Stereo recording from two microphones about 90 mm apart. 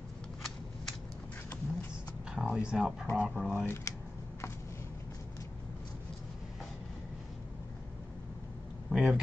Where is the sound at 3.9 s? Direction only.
35° left (ahead or behind).